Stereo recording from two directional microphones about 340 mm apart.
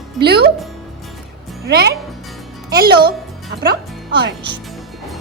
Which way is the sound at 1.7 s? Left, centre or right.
Right.